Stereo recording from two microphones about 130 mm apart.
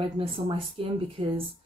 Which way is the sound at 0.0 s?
40° right (ahead or behind).